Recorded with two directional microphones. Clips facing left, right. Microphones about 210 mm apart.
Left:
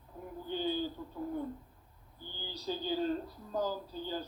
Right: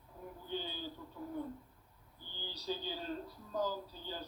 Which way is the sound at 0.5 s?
45° left (ahead or behind).